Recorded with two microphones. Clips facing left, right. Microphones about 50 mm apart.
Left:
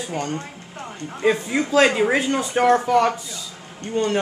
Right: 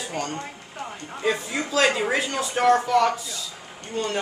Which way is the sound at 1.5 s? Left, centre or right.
Centre.